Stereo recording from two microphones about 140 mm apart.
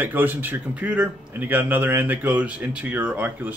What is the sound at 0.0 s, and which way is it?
Speech, 15° right (ahead or behind).